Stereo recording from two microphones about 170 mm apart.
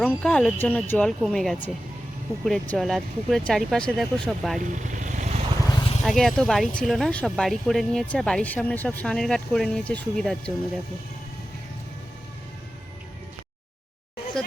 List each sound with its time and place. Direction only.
0.0 s speech: 10° left (ahead or behind)
4.7 s vehicle: 45° right (ahead or behind)
5.7 s vehicle: 35° left (ahead or behind)
6.0 s speech: centre (ahead or behind)